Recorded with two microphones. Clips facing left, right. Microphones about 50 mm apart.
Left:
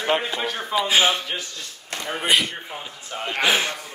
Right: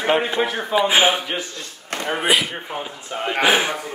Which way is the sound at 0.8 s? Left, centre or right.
Centre.